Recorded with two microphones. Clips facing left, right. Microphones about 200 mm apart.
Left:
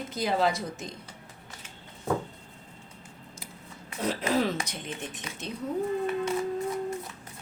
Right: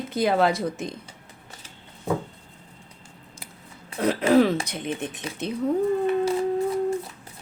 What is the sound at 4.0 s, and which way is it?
A woman's voice, 60° right (ahead or behind).